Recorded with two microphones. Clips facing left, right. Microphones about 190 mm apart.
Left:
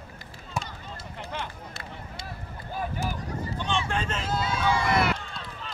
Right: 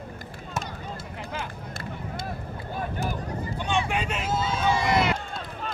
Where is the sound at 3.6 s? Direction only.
15° right (ahead or behind).